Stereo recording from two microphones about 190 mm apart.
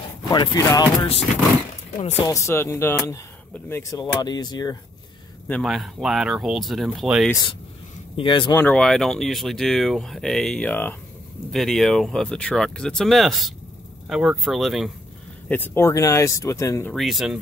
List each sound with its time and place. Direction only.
0.3 s speech: 20° left (ahead or behind)
2.0 s speech: 35° left (ahead or behind)
2.2 s speech: 15° left (ahead or behind)
5.5 s speech: centre (ahead or behind)
7.2 s speech: 20° left (ahead or behind)
8.5 s speech: 5° left (ahead or behind)
15.4 s speech: 10° left (ahead or behind)
16.9 s speech: centre (ahead or behind)